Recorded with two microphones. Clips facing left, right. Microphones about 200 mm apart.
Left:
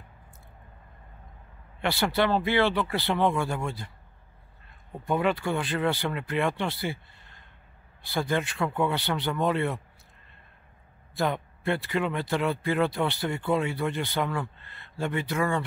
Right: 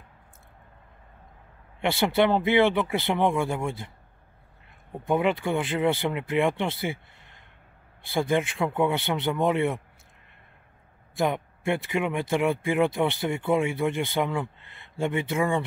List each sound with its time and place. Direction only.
1.8 s speech: 20° right (ahead or behind)
4.9 s speech: 20° right (ahead or behind)
11.1 s speech: 20° right (ahead or behind)